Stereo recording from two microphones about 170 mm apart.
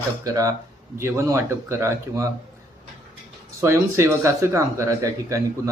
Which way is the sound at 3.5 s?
15° right (ahead or behind).